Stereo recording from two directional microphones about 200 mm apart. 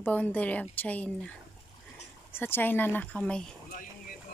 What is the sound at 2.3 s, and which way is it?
Speech, 10° left (ahead or behind).